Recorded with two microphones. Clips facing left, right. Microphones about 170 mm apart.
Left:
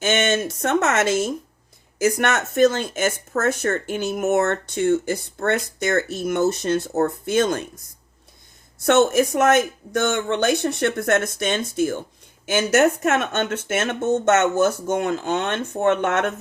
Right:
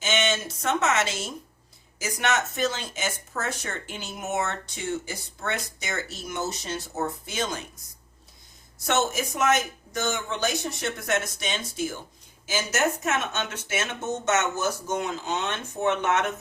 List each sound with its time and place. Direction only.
0.0 s speech: 55° left (ahead or behind)
8.9 s speech: 60° left (ahead or behind)